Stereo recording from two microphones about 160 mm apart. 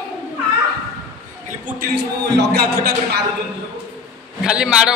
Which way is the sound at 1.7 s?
90° right.